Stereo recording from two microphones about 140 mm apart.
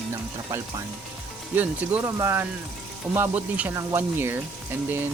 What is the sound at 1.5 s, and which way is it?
Speech, 10° right (ahead or behind).